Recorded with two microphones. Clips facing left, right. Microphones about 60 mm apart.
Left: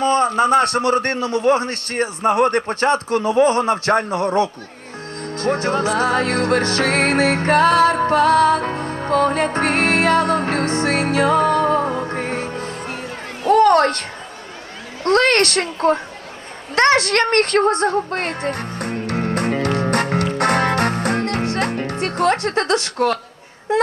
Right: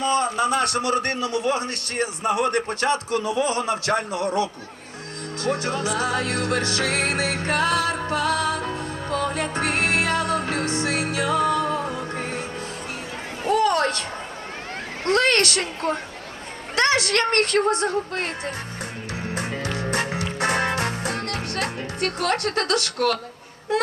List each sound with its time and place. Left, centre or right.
0.0 s a man's voice: left
5.4 s music: left
15.0 s a woman's voice: left
16.7 s music: left
22.1 s a man's voice: left
23.7 s a sound: left